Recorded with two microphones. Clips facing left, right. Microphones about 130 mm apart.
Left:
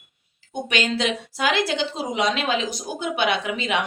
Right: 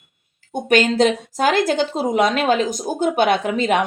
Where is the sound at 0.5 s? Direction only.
45° right (ahead or behind).